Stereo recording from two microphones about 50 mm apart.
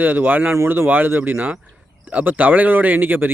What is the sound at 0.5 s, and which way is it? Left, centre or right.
Speech, right.